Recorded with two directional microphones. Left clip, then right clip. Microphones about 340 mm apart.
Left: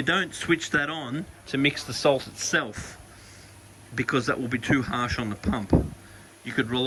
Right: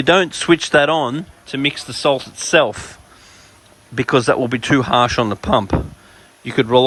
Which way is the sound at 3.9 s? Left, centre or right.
Centre.